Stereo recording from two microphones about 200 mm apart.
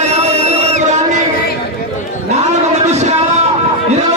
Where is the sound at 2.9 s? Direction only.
35° right (ahead or behind).